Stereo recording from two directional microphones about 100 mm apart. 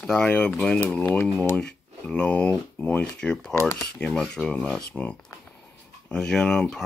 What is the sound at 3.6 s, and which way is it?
Speech, 25° left (ahead or behind).